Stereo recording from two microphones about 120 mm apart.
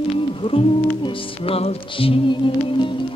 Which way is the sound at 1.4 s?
50° left (ahead or behind).